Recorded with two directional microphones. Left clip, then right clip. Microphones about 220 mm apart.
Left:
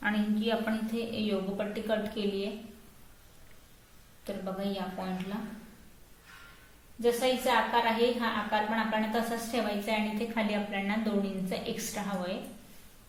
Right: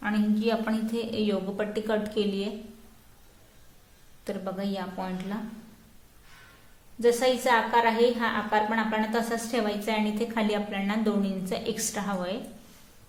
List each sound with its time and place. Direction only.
0.0 s a woman's voice: 25° right (ahead or behind)
4.3 s a woman's voice: 35° right (ahead or behind)
7.0 s a woman's voice: 35° right (ahead or behind)